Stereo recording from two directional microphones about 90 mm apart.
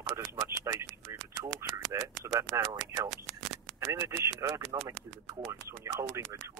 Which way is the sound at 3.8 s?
35° right (ahead or behind).